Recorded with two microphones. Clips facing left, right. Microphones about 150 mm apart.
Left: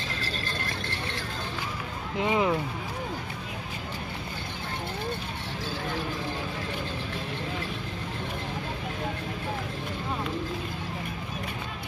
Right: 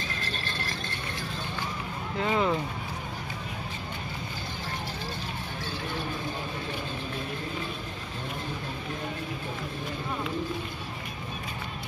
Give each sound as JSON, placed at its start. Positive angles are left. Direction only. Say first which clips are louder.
{"t": 2.1, "sound": "speech", "louder": "left 1 dB", "side_deg": 15}